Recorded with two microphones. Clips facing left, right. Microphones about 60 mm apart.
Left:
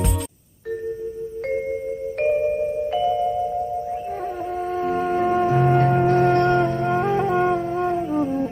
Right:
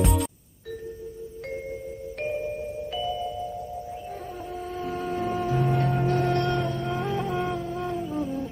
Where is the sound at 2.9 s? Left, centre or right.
Left.